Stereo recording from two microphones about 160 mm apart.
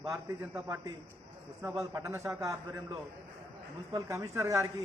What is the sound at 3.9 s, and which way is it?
Speech, 20° right (ahead or behind).